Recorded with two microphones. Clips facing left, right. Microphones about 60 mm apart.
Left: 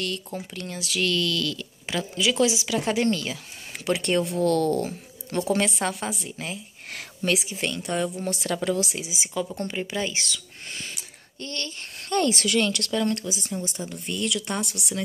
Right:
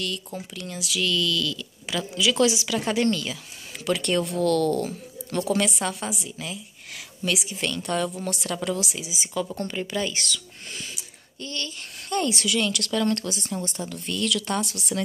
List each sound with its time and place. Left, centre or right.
0.0 s speech: left
11.0 s speech: left
13.5 s speech: right
13.7 s speech: left